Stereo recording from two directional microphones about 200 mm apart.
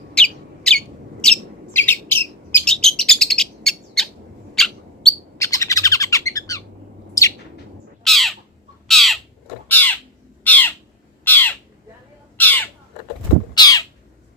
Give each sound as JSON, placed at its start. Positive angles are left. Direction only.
{"t": 0.1, "sound": "bird", "side_deg": 5}
{"t": 5.4, "sound": "bird", "side_deg": 15}
{"t": 8.0, "sound": "bird", "side_deg": 0}
{"t": 12.4, "sound": "crow", "side_deg": 10}
{"t": 13.5, "sound": "bird", "side_deg": 20}